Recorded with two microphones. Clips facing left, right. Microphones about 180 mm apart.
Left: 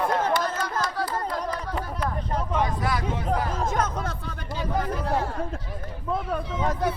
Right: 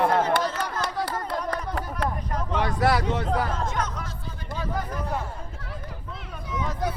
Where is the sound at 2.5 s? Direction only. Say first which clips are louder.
Right 4 dB; 75° right (ahead or behind).